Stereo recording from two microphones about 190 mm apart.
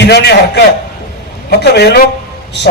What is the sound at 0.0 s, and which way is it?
A man's voice, 60° left (ahead or behind).